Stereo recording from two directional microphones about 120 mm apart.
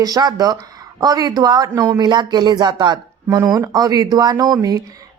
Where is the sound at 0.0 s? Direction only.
35° right (ahead or behind).